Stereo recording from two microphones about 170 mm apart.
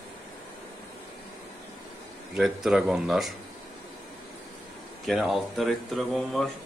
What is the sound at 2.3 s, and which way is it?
A man's voice, centre (ahead or behind).